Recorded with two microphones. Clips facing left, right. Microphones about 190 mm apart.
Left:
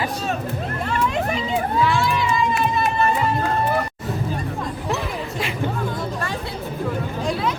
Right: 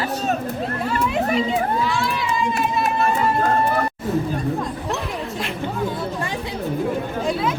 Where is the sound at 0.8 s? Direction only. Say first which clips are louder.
Right 1 dB; 5° right (ahead or behind).